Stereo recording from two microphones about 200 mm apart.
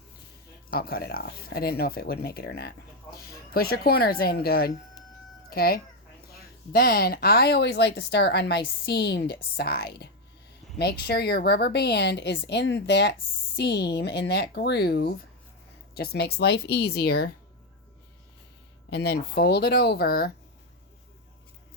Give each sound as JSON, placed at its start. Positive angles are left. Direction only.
{"t": 0.7, "sound": "speech", "side_deg": 50}
{"t": 18.9, "sound": "speech", "side_deg": 55}